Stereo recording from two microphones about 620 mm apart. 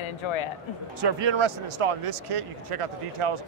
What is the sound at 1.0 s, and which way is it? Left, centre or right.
Speech, right.